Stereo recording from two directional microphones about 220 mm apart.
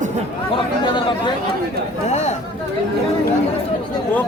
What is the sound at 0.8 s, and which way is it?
Speech, 20° left (ahead or behind).